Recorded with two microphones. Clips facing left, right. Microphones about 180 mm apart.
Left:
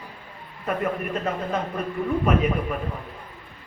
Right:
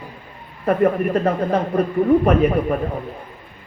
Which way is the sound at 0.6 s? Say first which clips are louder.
Right 9 dB; 50° right (ahead or behind).